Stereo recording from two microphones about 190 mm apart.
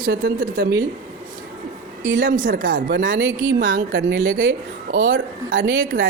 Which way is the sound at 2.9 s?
75° right (ahead or behind).